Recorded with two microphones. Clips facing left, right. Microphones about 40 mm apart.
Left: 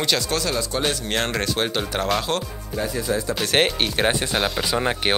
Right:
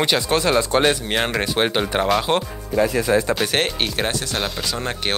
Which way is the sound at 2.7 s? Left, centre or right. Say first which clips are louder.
Right 7 dB; right.